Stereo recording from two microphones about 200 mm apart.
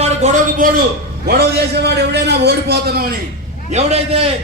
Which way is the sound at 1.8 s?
55° right (ahead or behind).